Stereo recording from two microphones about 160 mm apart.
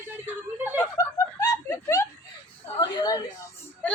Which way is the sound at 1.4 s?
20° left (ahead or behind).